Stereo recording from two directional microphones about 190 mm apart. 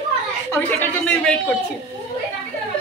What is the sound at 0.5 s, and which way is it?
A woman's voice, 10° left (ahead or behind).